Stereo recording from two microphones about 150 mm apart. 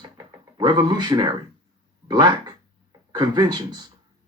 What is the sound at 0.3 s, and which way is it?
Speech, 25° right (ahead or behind).